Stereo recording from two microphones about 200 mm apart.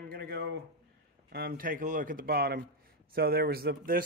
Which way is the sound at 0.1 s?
50° right (ahead or behind).